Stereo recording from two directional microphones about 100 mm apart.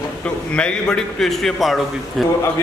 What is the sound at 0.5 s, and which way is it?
A man's voice, 10° left (ahead or behind).